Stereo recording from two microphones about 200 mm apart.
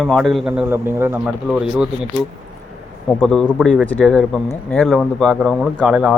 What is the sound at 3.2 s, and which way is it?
A man's voice, centre (ahead or behind).